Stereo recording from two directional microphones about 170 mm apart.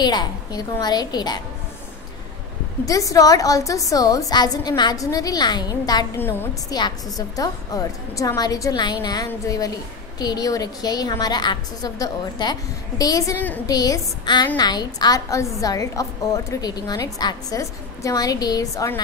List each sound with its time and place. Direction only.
0.0 s a woman's voice: 25° left (ahead or behind)
2.8 s a woman's voice: 20° left (ahead or behind)